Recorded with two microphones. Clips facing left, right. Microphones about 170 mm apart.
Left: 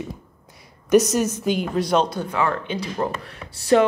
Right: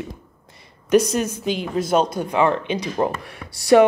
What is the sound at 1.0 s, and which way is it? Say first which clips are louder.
Speech: left 1 dB; 60° right (ahead or behind).